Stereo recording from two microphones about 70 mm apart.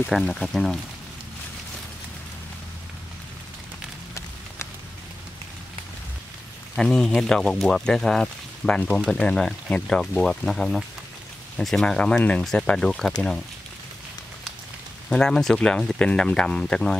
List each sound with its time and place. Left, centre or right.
0.2 s speech: centre
6.8 s speech: centre
15.0 s speech: centre